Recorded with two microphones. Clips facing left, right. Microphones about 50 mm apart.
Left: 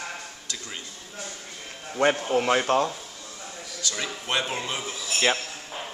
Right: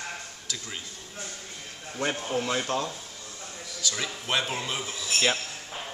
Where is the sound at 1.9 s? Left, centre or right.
Left.